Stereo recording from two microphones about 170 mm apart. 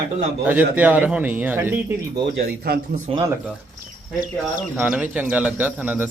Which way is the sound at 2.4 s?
65° right (ahead or behind).